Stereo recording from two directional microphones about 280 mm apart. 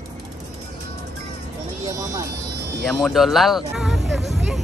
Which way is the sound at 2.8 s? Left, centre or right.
Centre.